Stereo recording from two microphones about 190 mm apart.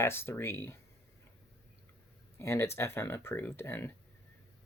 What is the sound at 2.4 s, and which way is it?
Speech, 15° left (ahead or behind).